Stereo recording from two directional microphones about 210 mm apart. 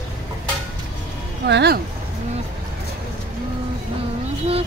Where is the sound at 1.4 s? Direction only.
50° right (ahead or behind).